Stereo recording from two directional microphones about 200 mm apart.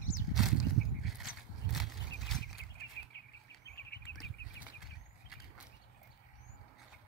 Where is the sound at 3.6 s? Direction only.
55° left (ahead or behind).